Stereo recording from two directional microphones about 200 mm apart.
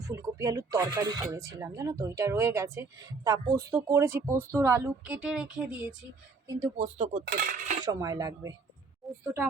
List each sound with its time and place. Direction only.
0.1 s speech: 15° right (ahead or behind)
6.7 s speech: 35° right (ahead or behind)
7.3 s cutlery: 50° right (ahead or behind)
7.9 s speech: 20° right (ahead or behind)